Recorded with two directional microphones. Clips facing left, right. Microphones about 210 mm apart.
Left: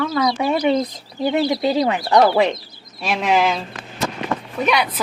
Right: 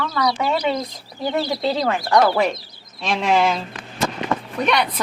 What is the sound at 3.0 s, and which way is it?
Speech, 5° left (ahead or behind).